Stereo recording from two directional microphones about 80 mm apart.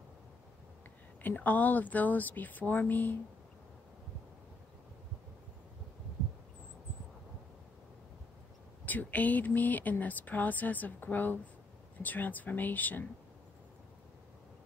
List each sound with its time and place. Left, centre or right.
1.2 s speech: left
8.8 s speech: left